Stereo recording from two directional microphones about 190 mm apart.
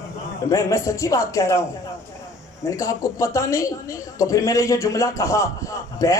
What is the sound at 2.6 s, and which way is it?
A man's voice, 15° left (ahead or behind).